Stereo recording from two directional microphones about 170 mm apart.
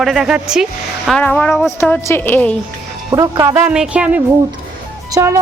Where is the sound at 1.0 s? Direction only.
5° left (ahead or behind).